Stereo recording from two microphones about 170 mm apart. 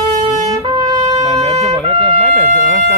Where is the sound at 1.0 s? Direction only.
40° right (ahead or behind).